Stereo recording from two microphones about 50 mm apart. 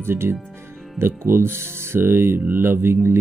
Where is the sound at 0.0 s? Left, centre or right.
Right.